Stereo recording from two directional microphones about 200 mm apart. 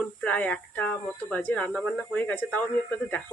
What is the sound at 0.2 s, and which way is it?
Speech, 5° left (ahead or behind).